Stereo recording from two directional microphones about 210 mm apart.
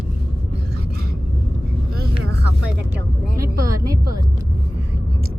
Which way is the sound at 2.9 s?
15° right (ahead or behind).